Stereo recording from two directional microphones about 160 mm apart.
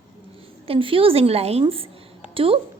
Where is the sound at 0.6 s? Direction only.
35° right (ahead or behind).